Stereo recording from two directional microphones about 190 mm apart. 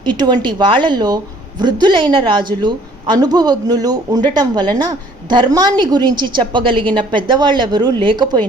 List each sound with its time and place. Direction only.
0.0 s a woman's voice: 25° right (ahead or behind)